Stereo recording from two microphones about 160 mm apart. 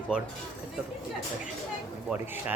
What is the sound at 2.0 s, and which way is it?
Speech, 10° right (ahead or behind).